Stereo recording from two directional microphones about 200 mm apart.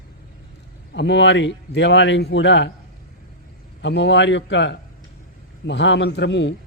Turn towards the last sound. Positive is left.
turn(degrees=65)  # may be behind; listen again after turning